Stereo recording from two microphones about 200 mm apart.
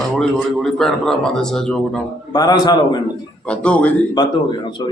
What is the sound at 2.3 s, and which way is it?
Speech, 20° left (ahead or behind).